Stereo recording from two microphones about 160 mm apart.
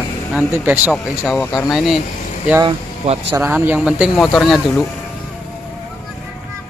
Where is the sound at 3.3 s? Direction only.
15° right (ahead or behind).